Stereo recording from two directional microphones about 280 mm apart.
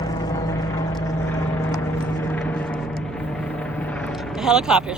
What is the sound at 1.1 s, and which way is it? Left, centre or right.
Vehicle, centre.